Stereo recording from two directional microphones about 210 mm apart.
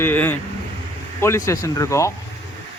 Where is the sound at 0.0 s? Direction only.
10° left (ahead or behind).